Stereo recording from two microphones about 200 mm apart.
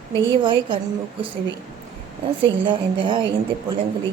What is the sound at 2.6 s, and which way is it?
Speech, 25° right (ahead or behind).